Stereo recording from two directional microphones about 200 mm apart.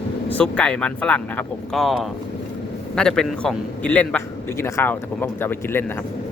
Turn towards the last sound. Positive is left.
turn(degrees=10)  # may be behind; listen again after turning